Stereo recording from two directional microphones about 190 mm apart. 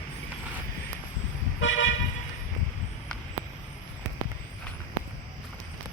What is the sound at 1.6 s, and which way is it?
Car, 90° left.